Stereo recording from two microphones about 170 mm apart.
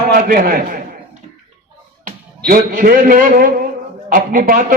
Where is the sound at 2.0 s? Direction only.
55° right (ahead or behind).